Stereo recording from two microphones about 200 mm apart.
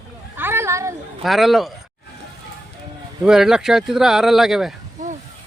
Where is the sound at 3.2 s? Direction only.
Centre (ahead or behind).